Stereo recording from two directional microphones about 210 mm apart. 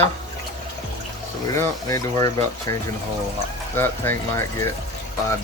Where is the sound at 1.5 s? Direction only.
15° left (ahead or behind).